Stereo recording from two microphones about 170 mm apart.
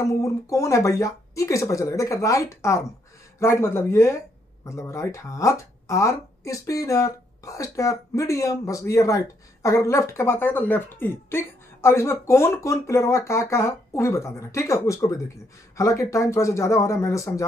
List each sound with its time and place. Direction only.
0.0 s a woman's voice: 20° left (ahead or behind)